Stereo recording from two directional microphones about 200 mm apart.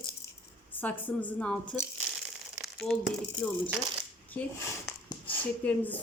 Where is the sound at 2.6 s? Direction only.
Centre (ahead or behind).